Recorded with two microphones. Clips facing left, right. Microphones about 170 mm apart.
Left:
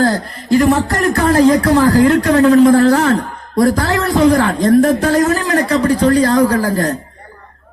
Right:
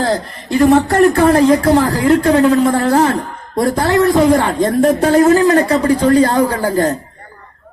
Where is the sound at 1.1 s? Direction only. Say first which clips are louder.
Right 1 dB; 30° right (ahead or behind).